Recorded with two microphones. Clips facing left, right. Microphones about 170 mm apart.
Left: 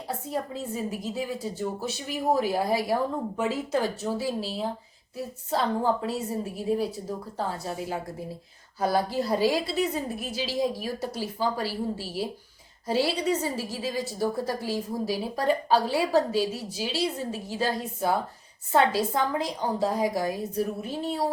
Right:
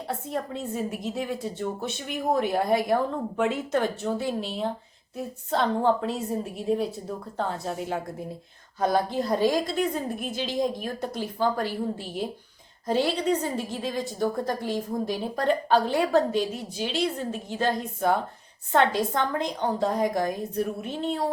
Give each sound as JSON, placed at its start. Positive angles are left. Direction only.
{"t": 0.1, "sound": "a woman's voice", "side_deg": 0}